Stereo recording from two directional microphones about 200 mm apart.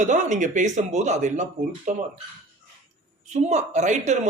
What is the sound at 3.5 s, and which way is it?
Speech, 35° right (ahead or behind).